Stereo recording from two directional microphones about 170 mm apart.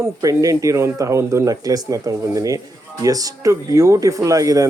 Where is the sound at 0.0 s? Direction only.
20° right (ahead or behind).